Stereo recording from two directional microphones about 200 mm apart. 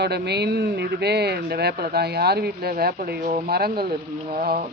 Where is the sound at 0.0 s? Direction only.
55° right (ahead or behind).